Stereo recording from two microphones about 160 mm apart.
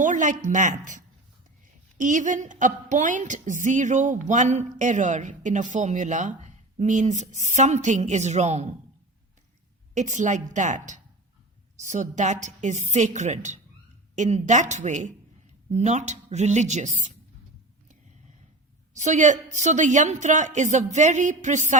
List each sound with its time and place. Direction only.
0.0 s a woman's voice: 50° right (ahead or behind)
9.9 s a woman's voice: 50° right (ahead or behind)
18.9 s a woman's voice: 50° right (ahead or behind)